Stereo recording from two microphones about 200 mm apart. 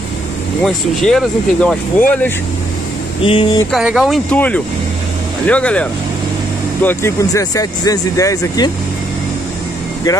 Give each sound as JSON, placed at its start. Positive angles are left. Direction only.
{"t": 0.7, "sound": "speech", "side_deg": 5}
{"t": 3.2, "sound": "speech", "side_deg": 25}
{"t": 3.7, "sound": "speech", "side_deg": 0}